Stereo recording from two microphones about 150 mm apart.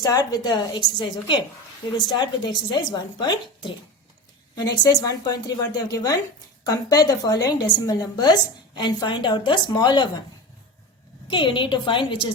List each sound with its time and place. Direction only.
0.0 s a woman's voice: 25° left (ahead or behind)
11.3 s a woman's voice: 35° left (ahead or behind)